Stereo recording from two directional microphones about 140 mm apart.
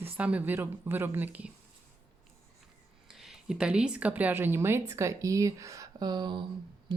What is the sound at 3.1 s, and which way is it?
Speech, centre (ahead or behind).